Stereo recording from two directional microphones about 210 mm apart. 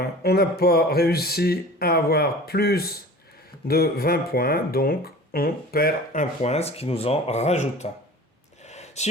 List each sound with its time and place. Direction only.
0.0 s speech: 50° left (ahead or behind)
6.4 s speech: 30° left (ahead or behind)
8.6 s a sound: 30° left (ahead or behind)